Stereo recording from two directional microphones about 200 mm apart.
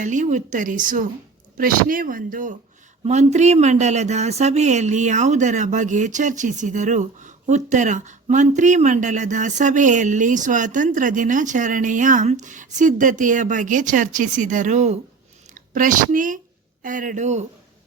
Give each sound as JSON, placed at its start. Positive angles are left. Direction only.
{"t": 0.0, "sound": "a woman's voice", "side_deg": -40}